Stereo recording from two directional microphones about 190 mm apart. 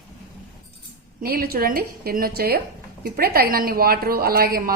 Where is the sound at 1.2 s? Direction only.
55° right (ahead or behind).